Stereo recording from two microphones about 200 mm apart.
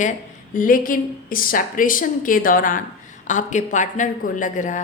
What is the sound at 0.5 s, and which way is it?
A woman's voice, 45° left (ahead or behind).